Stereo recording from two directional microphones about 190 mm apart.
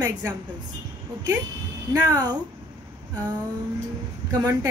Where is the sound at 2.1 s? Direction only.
20° right (ahead or behind).